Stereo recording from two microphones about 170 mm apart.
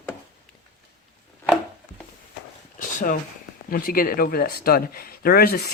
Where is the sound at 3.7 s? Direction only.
55° left (ahead or behind).